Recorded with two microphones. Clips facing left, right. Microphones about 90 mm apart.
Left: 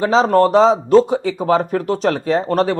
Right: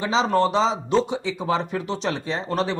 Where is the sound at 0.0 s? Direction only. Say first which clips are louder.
Left 7 dB; 50° left (ahead or behind).